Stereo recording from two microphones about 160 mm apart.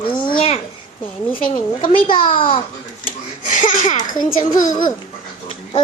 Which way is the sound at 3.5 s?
50° left (ahead or behind).